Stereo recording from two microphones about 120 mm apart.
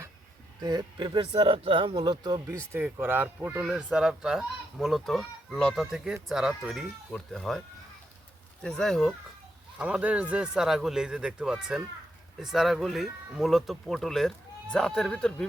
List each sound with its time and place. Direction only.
0.6 s speech: 30° right (ahead or behind)
2.5 s speech: 20° right (ahead or behind); by 7.6 s centre (ahead or behind)
8.6 s speech: 5° left (ahead or behind)
9.7 s speech: 10° right (ahead or behind); by 15.4 s 5° left (ahead or behind)